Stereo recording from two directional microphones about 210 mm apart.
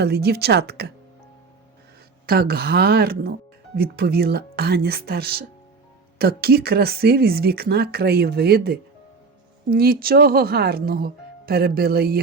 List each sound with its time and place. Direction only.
0.0 s speech: 50° right (ahead or behind)
2.2 s speech: 50° right (ahead or behind)